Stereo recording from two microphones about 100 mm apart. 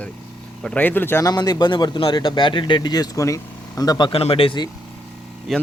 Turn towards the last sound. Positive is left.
turn(degrees=0)  # may be behind; listen again after turning